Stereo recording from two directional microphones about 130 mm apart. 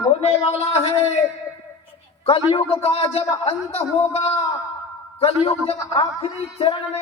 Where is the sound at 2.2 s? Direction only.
40° left (ahead or behind).